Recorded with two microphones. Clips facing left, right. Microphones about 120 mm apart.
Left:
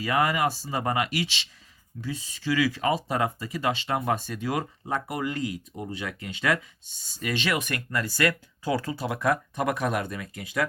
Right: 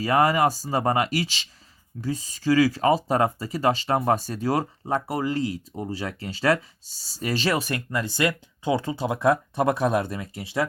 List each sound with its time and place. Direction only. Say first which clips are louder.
0.0 s speech: right 4 dB; 35° right (ahead or behind)
7.9 s speech: even; 25° right (ahead or behind)